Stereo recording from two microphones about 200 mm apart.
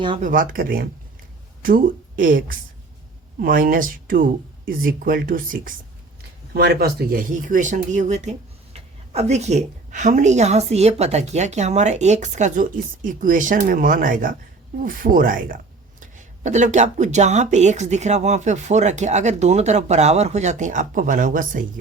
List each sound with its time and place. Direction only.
0.2 s speech: 45° right (ahead or behind)
3.4 s speech: 45° right (ahead or behind)